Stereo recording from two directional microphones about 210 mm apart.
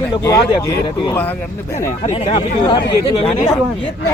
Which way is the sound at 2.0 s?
30° left (ahead or behind).